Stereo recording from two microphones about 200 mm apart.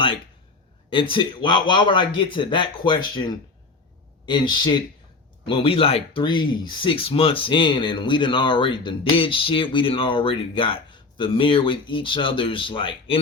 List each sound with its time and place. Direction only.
0.9 s speech: 25° left (ahead or behind)